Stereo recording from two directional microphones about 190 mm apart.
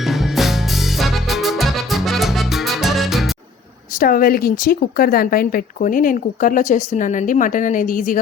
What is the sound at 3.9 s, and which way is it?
Speech, 50° left (ahead or behind).